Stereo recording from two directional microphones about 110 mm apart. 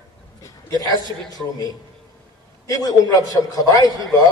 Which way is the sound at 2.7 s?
35° left (ahead or behind).